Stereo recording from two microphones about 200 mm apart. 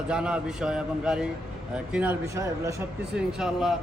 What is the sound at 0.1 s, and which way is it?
A man's voice, 5° right (ahead or behind).